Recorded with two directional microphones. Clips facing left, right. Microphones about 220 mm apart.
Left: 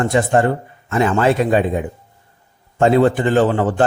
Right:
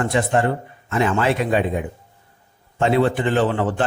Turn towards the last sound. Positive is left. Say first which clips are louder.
# left 5 dB
turn(degrees=45)  # may be behind; listen again after turning